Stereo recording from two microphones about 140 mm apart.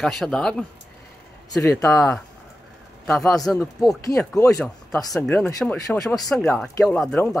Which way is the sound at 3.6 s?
Centre (ahead or behind).